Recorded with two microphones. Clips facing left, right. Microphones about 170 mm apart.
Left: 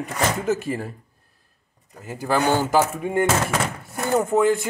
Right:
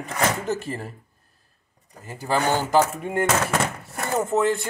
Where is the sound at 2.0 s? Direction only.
10° left (ahead or behind).